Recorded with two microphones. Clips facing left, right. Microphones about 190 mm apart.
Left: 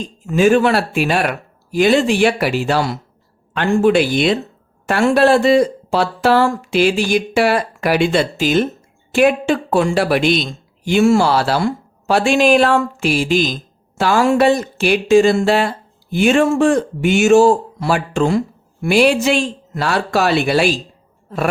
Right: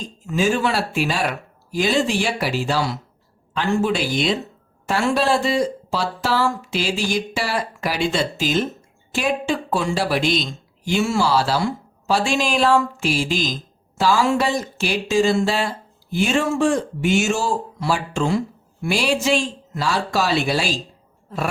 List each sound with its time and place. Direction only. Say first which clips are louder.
0.3 s speech: left 7 dB; 60° left (ahead or behind)